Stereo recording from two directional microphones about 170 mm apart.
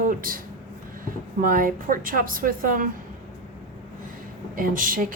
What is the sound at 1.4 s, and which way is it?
A woman's voice, 55° right (ahead or behind).